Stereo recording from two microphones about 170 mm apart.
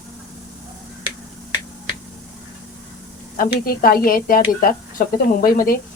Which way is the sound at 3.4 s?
60° left (ahead or behind).